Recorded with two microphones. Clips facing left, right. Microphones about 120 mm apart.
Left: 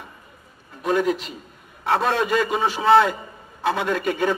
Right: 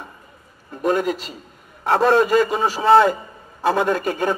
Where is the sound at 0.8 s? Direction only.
40° right (ahead or behind).